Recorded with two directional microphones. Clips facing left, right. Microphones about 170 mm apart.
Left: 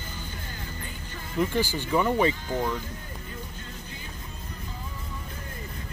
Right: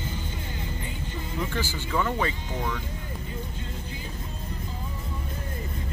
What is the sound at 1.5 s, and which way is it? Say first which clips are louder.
Speech: left 4 dB; 15° left (ahead or behind).